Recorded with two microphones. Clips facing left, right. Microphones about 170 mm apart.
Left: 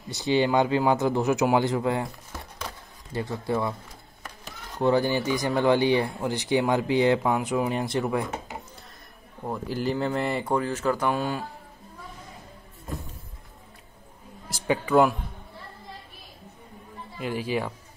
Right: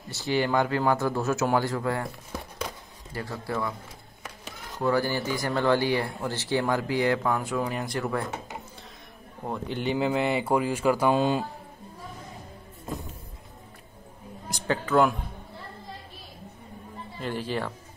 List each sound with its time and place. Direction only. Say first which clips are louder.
0.1 s speech: left 3 dB; 20° left (ahead or behind)
3.1 s speech: left 5 dB; 20° left (ahead or behind)
4.7 s speech: left 3 dB; 25° left (ahead or behind)
9.5 s speech: left 1 dB; centre (ahead or behind)
11.1 s a man's voice: right 4 dB; 20° right (ahead or behind)
14.5 s a man's voice: left 2 dB; 5° left (ahead or behind)
17.2 s speech: left 2 dB; 10° left (ahead or behind)